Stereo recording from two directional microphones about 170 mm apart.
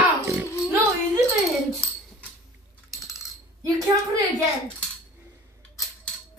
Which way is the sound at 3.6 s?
20° right (ahead or behind).